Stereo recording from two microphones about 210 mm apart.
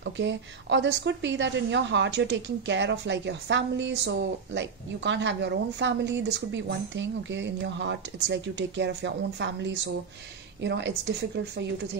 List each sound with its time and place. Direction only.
0.0 s a woman's voice: 60° right (ahead or behind)